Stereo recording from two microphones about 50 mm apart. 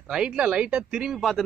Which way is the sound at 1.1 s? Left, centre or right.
Centre.